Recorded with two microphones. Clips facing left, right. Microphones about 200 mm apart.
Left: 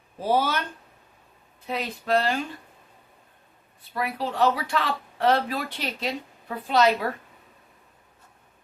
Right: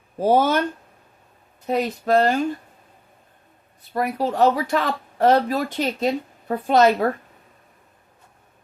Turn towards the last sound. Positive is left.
turn(degrees=-45)  # may be behind; listen again after turning